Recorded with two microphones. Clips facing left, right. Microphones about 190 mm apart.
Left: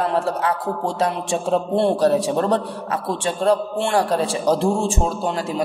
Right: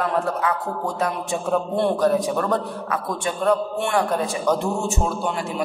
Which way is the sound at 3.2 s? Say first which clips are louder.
Left 2 dB; 30° left (ahead or behind).